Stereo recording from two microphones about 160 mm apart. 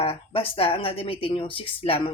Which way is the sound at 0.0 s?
35° left (ahead or behind).